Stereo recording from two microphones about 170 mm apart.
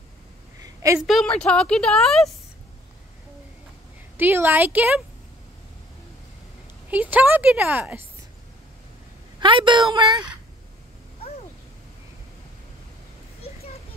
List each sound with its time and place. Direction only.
0.9 s a woman's voice: centre (ahead or behind)
4.2 s speech: 15° right (ahead or behind)
6.9 s speech: 10° right (ahead or behind)
9.4 s a woman's voice: 30° right (ahead or behind)